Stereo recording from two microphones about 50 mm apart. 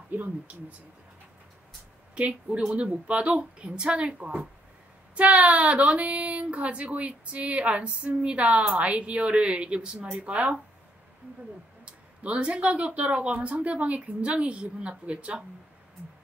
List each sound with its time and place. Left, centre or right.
0.2 s speech: right
2.1 s speech: right
11.8 s speech: right